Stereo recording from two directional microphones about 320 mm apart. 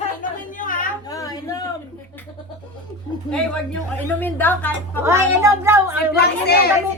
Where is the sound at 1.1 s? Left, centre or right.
Centre.